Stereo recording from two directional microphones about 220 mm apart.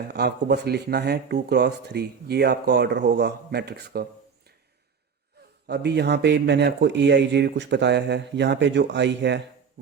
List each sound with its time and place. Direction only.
0.1 s speech: 50° right (ahead or behind)
5.6 s speech: 50° right (ahead or behind)